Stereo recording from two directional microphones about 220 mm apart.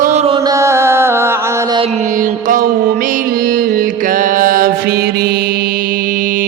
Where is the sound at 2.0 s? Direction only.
35° right (ahead or behind).